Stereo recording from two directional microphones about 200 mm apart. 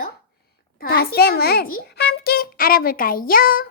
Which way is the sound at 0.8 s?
50° left (ahead or behind).